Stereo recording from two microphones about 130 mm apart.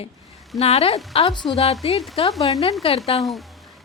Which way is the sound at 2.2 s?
45° left (ahead or behind).